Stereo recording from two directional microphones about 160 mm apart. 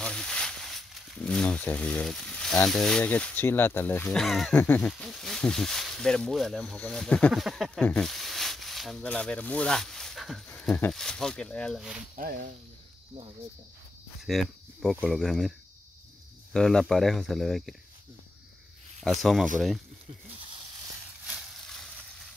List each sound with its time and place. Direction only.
0.0 s speech: 5° left (ahead or behind)
12.2 s speech: 65° right (ahead or behind)
14.2 s speech: centre (ahead or behind)
16.5 s speech: 5° left (ahead or behind)
21.3 s a sound: centre (ahead or behind)